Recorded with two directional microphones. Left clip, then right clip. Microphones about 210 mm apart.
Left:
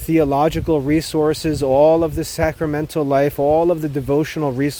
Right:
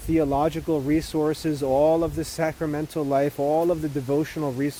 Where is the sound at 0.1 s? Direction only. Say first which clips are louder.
Left 6 dB; 50° left (ahead or behind).